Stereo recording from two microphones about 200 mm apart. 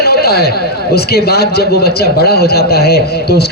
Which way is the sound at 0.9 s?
50° left (ahead or behind).